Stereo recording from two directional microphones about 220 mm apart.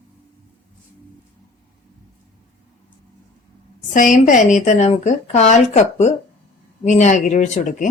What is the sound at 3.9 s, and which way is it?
Speech, 35° left (ahead or behind).